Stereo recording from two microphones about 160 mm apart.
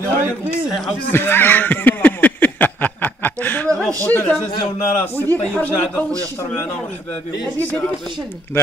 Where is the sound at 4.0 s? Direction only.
10° left (ahead or behind).